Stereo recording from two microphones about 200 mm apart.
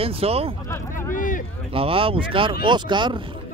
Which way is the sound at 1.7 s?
25° right (ahead or behind).